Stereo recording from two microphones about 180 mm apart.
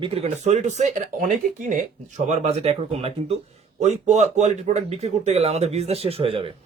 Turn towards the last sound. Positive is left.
turn(degrees=-30)  # may be behind; listen again after turning